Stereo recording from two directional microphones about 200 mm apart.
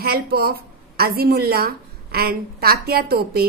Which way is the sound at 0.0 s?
50° right (ahead or behind).